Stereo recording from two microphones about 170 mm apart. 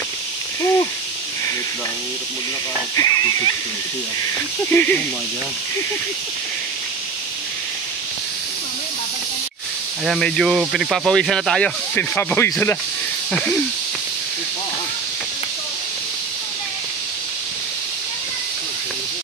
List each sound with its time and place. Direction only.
0.6 s a sound: 15° left (ahead or behind)
3.0 s speech: 20° left (ahead or behind)
4.6 s speech: 10° left (ahead or behind)
10.0 s speech: 5° left (ahead or behind)